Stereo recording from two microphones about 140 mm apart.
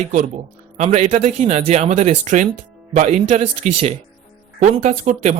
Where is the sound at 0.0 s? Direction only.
55° right (ahead or behind).